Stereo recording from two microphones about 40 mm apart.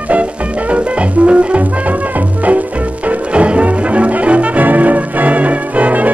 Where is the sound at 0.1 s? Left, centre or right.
Right.